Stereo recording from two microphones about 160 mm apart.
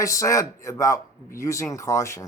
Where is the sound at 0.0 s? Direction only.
20° left (ahead or behind).